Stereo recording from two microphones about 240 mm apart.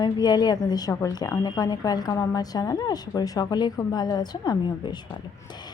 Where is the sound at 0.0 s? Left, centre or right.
Centre.